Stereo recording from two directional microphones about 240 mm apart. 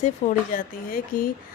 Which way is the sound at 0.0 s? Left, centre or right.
Left.